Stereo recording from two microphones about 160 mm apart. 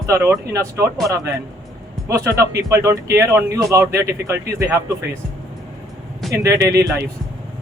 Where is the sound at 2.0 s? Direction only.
20° right (ahead or behind).